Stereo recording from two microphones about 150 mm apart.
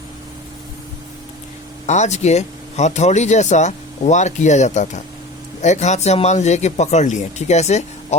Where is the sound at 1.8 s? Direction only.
50° left (ahead or behind).